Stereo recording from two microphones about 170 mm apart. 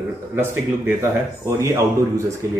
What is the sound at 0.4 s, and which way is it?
Speech, 15° right (ahead or behind).